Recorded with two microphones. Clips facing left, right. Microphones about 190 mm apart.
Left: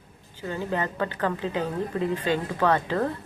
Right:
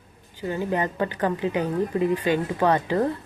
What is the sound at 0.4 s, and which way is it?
A woman's voice, 15° right (ahead or behind).